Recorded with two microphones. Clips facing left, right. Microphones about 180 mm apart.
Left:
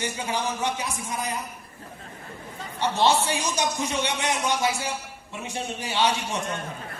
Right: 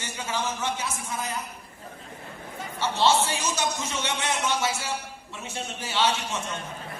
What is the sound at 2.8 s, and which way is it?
A man's voice, 15° left (ahead or behind).